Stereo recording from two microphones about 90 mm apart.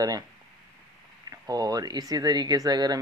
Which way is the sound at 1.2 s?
45° right (ahead or behind).